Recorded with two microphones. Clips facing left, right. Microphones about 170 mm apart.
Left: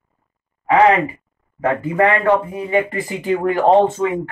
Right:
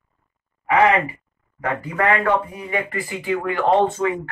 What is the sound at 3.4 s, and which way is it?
Speech, 40° left (ahead or behind).